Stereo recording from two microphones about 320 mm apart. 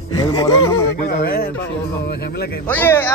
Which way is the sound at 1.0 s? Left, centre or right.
Left.